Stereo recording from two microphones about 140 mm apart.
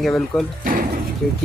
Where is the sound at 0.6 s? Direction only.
90° right.